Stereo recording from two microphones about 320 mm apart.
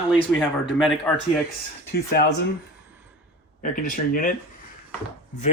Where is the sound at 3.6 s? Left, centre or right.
Left.